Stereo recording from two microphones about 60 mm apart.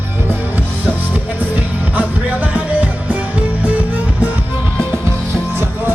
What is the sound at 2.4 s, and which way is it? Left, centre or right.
Music, right.